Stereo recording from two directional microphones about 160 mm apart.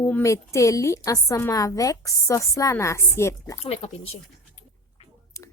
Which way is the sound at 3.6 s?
40° left (ahead or behind).